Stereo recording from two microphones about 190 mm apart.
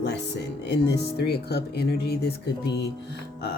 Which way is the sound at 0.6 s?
60° left (ahead or behind).